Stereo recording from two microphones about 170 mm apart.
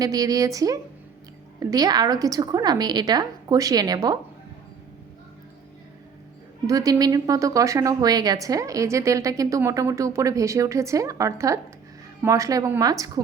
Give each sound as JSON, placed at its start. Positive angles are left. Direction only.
{"t": 0.0, "sound": "a woman's voice", "side_deg": -20}
{"t": 6.7, "sound": "a woman's voice", "side_deg": -20}